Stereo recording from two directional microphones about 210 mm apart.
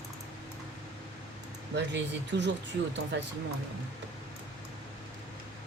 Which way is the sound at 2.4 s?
55° right (ahead or behind).